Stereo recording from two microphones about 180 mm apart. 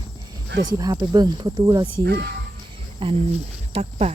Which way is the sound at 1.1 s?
20° right (ahead or behind).